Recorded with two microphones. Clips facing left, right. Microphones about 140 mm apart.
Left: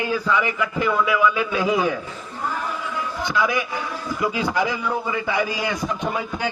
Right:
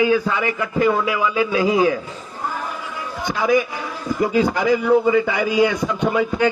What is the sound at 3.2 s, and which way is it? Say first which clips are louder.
A man's voice: right 6 dB; 45° right (ahead or behind).